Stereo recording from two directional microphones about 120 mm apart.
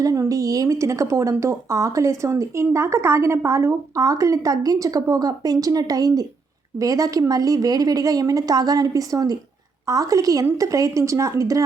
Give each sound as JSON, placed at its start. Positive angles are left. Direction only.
{"t": 0.0, "sound": "a woman's voice", "side_deg": -30}